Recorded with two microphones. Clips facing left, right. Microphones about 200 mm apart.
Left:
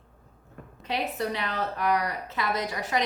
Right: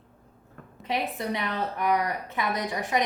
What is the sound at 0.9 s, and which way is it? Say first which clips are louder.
A woman's voice: even; 20° right (ahead or behind).